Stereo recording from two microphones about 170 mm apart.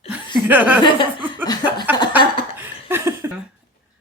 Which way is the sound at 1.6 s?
25° left (ahead or behind).